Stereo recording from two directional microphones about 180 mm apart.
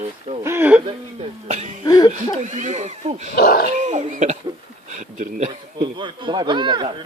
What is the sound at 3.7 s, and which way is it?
Speech, 40° right (ahead or behind).